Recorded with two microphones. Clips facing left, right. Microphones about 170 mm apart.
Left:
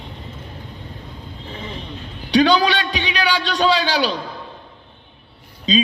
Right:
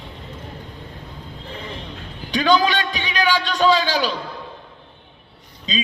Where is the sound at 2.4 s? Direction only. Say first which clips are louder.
Left 1 dB; 45° right (ahead or behind).